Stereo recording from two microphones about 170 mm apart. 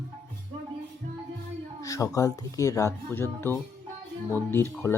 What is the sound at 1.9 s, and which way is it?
Speech, 20° left (ahead or behind).